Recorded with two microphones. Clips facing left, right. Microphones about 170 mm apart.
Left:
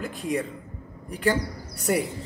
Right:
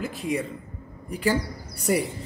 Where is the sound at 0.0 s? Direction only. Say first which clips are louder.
Even; 5° right (ahead or behind).